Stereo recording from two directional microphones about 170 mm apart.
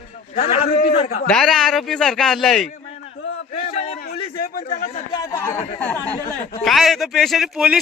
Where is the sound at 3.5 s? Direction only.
35° left (ahead or behind).